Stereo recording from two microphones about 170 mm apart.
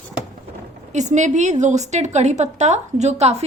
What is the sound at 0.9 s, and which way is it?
A woman's voice, 45° right (ahead or behind).